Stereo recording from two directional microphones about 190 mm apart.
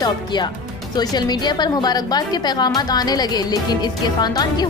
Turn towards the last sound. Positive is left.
turn(degrees=20)  # may be behind; listen again after turning